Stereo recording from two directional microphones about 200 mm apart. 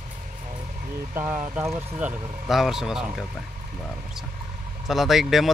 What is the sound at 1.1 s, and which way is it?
Speech, 10° right (ahead or behind).